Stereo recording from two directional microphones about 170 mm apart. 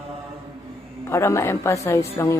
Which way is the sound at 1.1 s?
15° left (ahead or behind).